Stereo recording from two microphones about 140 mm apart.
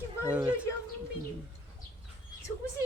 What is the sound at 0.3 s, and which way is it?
Speech, 10° right (ahead or behind).